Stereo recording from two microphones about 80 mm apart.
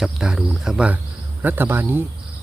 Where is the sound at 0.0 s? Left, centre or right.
Centre.